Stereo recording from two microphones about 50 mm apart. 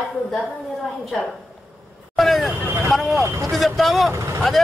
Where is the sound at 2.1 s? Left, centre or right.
Centre.